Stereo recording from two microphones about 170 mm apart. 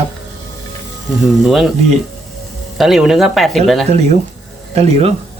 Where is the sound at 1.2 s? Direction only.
Centre (ahead or behind).